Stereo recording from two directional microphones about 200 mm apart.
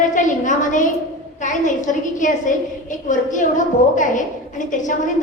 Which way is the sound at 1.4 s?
40° left (ahead or behind).